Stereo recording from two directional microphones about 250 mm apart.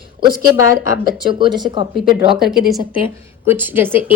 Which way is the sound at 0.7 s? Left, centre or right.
Centre.